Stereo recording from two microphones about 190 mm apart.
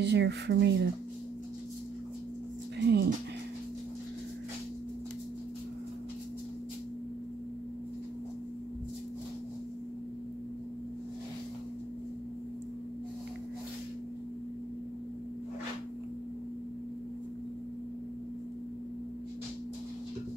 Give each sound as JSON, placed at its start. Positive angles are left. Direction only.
{"t": 0.0, "sound": "speech", "side_deg": -65}
{"t": 2.8, "sound": "music", "side_deg": -60}